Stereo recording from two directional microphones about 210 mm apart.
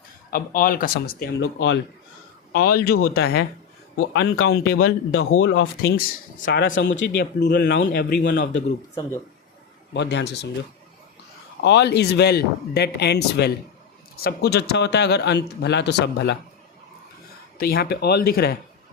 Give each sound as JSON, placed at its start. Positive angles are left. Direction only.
{"t": 0.3, "sound": "speech", "side_deg": 45}
{"t": 1.4, "sound": "speech", "side_deg": 70}
{"t": 2.5, "sound": "speech", "side_deg": 45}
{"t": 5.1, "sound": "speech", "side_deg": 75}
{"t": 6.4, "sound": "speech", "side_deg": 55}
{"t": 9.9, "sound": "speech", "side_deg": 55}
{"t": 11.6, "sound": "speech", "side_deg": 55}
{"t": 17.6, "sound": "speech", "side_deg": 45}